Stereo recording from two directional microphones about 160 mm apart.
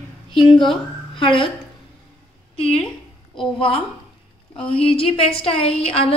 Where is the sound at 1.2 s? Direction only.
30° left (ahead or behind).